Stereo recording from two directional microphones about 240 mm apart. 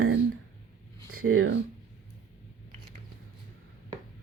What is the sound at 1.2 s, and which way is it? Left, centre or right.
Speech, right.